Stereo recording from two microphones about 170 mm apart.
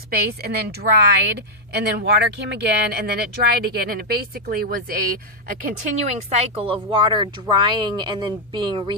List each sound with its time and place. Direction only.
0.1 s a woman's voice: 70° right (ahead or behind)
6.1 s speech: 40° right (ahead or behind); by 9.0 s 25° right (ahead or behind)